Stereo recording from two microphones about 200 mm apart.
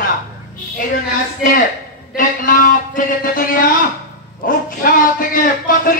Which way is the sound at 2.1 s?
40° left (ahead or behind).